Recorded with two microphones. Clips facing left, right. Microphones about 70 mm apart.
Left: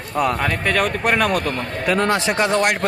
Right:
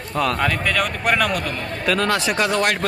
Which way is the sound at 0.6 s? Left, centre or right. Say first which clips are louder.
Left 2 dB; left.